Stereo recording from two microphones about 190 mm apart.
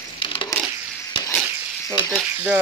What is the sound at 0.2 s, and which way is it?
Crushing, 25° left (ahead or behind).